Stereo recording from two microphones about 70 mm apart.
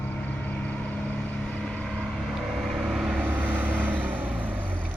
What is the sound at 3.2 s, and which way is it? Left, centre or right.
Vehicle, right.